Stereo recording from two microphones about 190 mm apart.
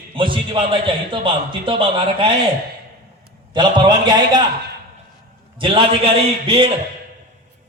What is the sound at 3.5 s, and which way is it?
Speech, 25° right (ahead or behind).